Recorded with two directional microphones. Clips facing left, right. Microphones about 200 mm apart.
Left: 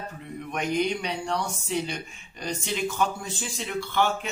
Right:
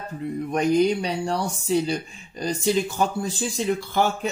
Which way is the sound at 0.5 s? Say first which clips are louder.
Right 7 dB; 35° right (ahead or behind).